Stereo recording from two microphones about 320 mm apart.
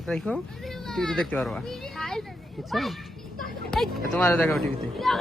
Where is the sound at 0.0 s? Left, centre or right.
Centre.